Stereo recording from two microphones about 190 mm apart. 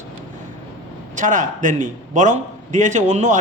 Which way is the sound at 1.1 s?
40° right (ahead or behind).